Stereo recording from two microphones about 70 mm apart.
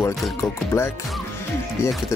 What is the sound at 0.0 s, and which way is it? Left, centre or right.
Speech, left.